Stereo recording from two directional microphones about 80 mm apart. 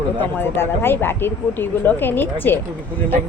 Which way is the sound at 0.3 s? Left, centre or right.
Left.